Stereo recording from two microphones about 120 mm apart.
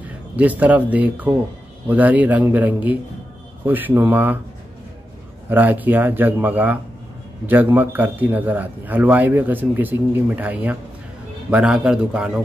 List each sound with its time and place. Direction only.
0.4 s a man's voice: 15° right (ahead or behind)
5.5 s a man's voice: 15° right (ahead or behind)